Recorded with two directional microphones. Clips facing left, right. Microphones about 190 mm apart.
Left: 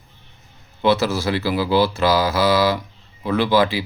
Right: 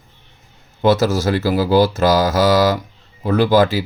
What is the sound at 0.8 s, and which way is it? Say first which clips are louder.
Speech: right 3 dB; 45° right (ahead or behind).